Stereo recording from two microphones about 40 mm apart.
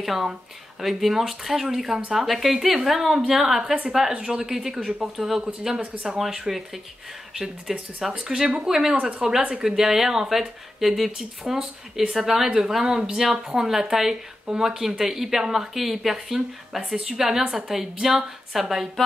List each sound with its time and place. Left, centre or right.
0.0 s a woman's voice: centre
4.1 s a woman's voice: centre
8.3 s a woman's voice: right; by 18.9 s centre